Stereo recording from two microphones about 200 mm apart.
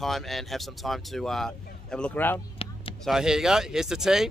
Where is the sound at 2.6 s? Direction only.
30° left (ahead or behind).